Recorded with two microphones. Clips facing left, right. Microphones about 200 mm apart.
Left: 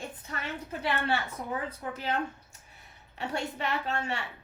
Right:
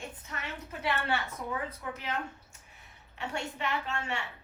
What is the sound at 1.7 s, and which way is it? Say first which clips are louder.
Speech: left 4 dB; 35° left (ahead or behind).